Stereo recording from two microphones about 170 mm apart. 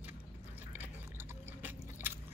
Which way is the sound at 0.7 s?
10° right (ahead or behind).